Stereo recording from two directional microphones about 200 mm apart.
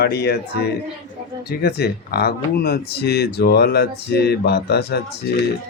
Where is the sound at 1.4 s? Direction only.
55° left (ahead or behind).